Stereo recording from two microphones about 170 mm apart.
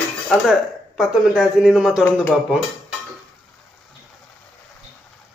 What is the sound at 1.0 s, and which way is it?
A man's voice, centre (ahead or behind).